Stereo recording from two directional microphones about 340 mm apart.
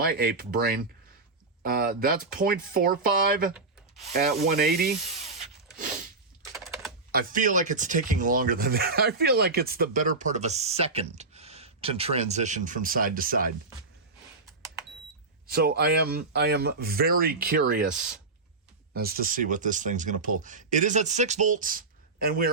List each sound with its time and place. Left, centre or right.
0.0 s speech: right
3.5 s rub: centre
4.1 s speech: right
6.5 s typing: centre
7.1 s speech: right
15.4 s speech: right
18.9 s speech: right